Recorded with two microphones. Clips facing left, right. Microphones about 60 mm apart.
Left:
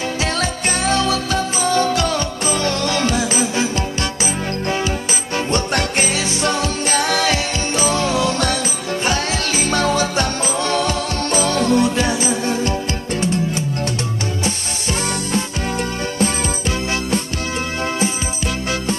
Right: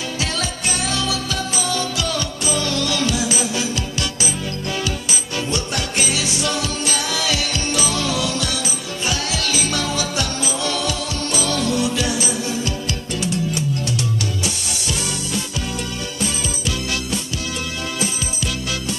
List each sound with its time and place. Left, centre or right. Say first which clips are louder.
0.2 s music: left 3 dB; left
5.5 s music: left 6 dB; left
16.2 s music: left 6 dB; left